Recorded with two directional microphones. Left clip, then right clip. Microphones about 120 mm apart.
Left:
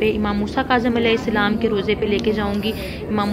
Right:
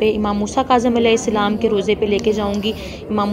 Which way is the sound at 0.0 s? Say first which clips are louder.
Right 3 dB; 30° right (ahead or behind).